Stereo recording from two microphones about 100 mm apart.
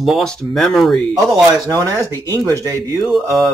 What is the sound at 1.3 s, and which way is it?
Speech, 35° right (ahead or behind).